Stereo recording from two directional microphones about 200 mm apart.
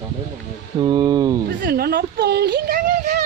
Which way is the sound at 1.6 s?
50° right (ahead or behind).